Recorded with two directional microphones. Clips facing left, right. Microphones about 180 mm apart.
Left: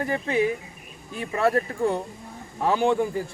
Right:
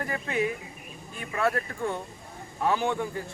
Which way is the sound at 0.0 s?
35° left (ahead or behind).